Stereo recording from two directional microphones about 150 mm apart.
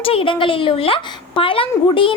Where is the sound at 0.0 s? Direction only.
40° left (ahead or behind).